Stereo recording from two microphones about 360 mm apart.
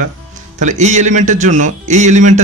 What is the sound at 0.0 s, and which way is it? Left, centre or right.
Speech, right.